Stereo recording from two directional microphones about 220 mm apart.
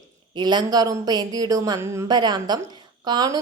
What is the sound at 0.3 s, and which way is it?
A woman's voice, 20° right (ahead or behind).